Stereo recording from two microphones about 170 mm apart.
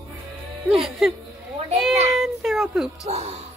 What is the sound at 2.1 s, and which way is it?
Speech, centre (ahead or behind).